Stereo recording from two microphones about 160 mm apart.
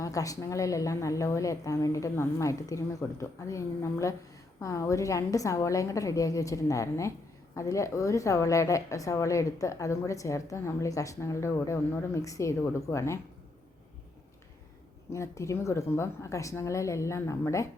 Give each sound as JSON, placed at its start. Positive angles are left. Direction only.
{"t": 0.0, "sound": "a woman's voice", "side_deg": 20}
{"t": 15.1, "sound": "a woman's voice", "side_deg": 20}